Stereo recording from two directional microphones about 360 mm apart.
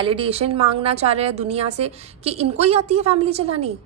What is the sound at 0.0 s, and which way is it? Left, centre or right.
A woman's voice, centre.